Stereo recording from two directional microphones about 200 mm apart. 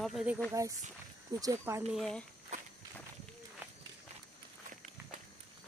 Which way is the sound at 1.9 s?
Centre (ahead or behind).